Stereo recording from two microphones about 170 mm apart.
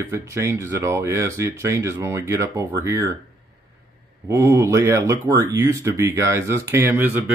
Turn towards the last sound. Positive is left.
turn(degrees=-10)  # may be behind; listen again after turning